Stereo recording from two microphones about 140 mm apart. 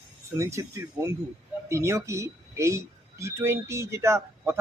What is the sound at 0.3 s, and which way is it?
Speech, 20° right (ahead or behind).